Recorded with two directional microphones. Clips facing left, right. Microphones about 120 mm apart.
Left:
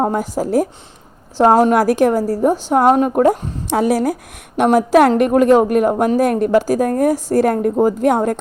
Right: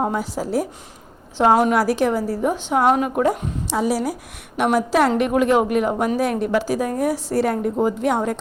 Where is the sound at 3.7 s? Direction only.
60° left (ahead or behind).